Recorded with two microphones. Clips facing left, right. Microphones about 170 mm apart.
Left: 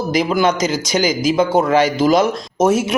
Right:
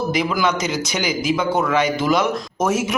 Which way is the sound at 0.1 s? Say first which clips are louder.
Left 4 dB; 40° left (ahead or behind).